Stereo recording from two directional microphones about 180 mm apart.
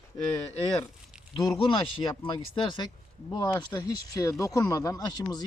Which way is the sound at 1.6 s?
30° left (ahead or behind).